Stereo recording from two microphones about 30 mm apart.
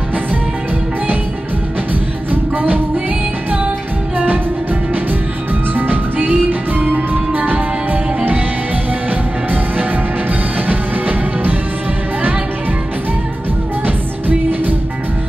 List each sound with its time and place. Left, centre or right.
2.5 s music: right
5.8 s music: right
10.7 s music: right